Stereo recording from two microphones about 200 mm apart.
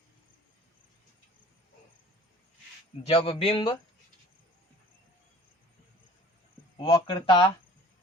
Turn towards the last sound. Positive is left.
turn(degrees=25)  # may be behind; listen again after turning